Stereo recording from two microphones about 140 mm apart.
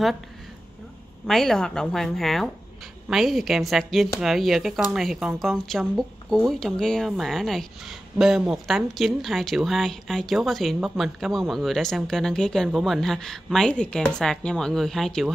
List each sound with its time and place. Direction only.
1.2 s speech: centre (ahead or behind)